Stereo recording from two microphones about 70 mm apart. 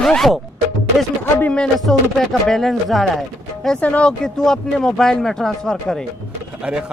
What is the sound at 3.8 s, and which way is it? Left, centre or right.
Speech, centre.